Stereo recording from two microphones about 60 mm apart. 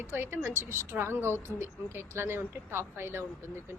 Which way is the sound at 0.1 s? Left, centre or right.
Right.